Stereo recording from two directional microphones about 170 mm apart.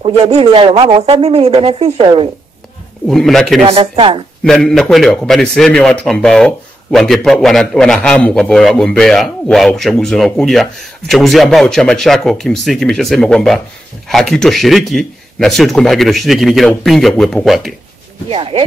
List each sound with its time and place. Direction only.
0.0 s speech: 35° right (ahead or behind)
3.1 s a man's voice: centre (ahead or behind)
3.6 s speech: 35° right (ahead or behind)
4.5 s a man's voice: centre (ahead or behind)
18.3 s speech: 35° right (ahead or behind)